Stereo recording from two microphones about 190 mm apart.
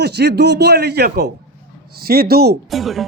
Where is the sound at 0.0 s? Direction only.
60° right (ahead or behind).